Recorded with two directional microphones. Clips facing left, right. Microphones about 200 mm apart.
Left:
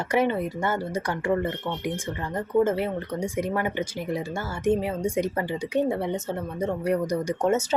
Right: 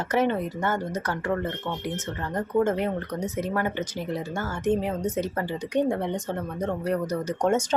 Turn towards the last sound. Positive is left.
turn(degrees=10)  # may be behind; listen again after turning